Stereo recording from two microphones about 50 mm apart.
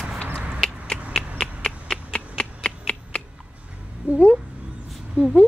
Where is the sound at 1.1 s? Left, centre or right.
Centre.